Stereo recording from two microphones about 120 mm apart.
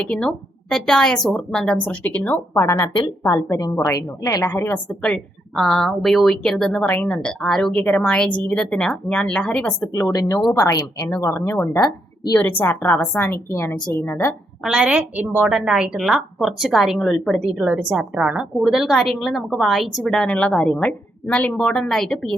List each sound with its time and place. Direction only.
0.0 s a woman's voice: 5° left (ahead or behind)
5.0 s a woman's voice: 5° left (ahead or behind)
9.8 s a woman's voice: 25° left (ahead or behind)
14.6 s a woman's voice: 5° right (ahead or behind)
15.4 s a woman's voice: 5° right (ahead or behind)